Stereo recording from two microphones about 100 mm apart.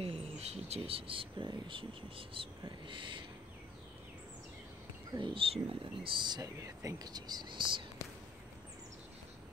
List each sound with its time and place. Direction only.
0.0 s speech: 90° right; by 3.3 s 55° right (ahead or behind)
5.2 s speech: 65° right (ahead or behind)